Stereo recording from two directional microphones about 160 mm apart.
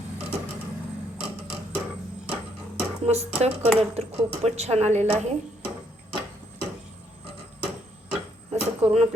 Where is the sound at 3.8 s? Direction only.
40° right (ahead or behind).